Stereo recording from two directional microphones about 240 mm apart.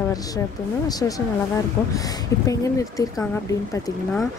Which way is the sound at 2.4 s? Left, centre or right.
Centre.